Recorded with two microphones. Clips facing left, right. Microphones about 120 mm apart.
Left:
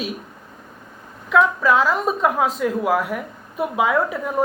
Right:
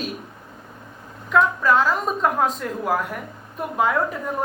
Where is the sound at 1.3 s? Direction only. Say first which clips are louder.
Left 2 dB; centre (ahead or behind).